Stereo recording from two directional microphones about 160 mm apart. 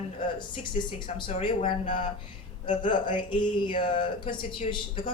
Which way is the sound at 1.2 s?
35° left (ahead or behind).